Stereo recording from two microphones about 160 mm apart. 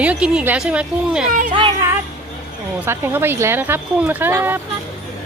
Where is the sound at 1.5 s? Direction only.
30° right (ahead or behind).